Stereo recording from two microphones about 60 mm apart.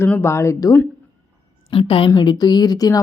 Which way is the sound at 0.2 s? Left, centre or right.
Left.